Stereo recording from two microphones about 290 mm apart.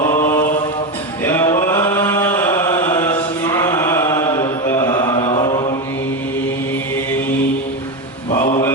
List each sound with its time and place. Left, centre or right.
0.0 s mantra: centre
1.2 s chant: centre
8.3 s mantra: centre